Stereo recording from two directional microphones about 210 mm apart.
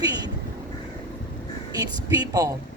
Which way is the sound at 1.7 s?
20° right (ahead or behind).